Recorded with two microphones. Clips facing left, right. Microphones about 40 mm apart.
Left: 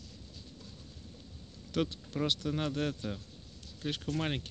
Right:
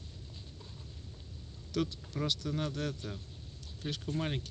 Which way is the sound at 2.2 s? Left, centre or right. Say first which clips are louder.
Left 2 dB; left.